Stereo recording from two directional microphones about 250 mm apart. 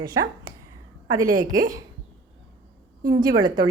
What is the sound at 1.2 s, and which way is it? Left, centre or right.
Speech, right.